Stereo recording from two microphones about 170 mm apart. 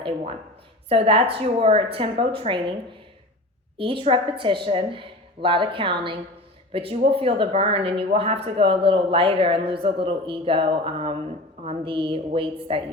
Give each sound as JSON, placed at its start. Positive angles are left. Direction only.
{"t": 0.9, "sound": "speech", "side_deg": -35}
{"t": 3.8, "sound": "a woman's voice", "side_deg": -30}